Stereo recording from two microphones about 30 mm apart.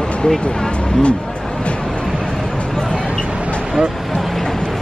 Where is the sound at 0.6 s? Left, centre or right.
Left.